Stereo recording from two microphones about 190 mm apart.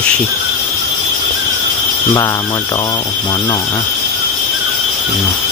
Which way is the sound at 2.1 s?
15° left (ahead or behind).